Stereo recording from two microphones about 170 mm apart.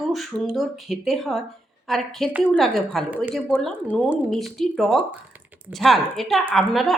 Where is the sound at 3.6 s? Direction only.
5° left (ahead or behind).